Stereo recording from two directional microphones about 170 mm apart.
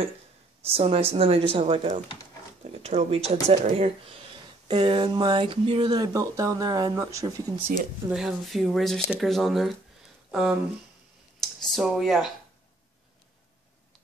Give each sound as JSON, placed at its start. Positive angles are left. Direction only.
{"t": 0.7, "sound": "a woman's voice", "side_deg": -35}
{"t": 8.1, "sound": "speech", "side_deg": -5}
{"t": 11.4, "sound": "speech", "side_deg": 0}